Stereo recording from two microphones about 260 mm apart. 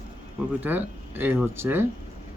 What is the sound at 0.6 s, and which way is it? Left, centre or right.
Speech, centre.